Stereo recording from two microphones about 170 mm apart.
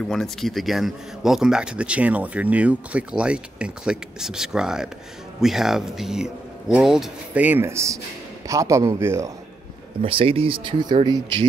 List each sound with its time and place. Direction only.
0.0 s speech: centre (ahead or behind); by 9.3 s 15° right (ahead or behind)
10.0 s speech: 30° right (ahead or behind)